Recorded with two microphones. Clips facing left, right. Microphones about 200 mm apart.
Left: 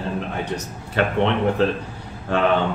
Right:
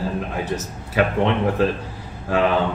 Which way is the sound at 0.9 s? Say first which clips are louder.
Right 1 dB; centre (ahead or behind).